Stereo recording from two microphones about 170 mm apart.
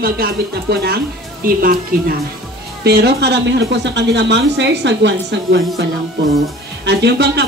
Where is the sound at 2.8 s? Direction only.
70° right (ahead or behind); by 5.6 s 90° right.